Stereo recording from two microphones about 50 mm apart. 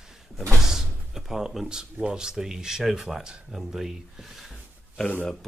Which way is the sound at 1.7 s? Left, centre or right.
Centre.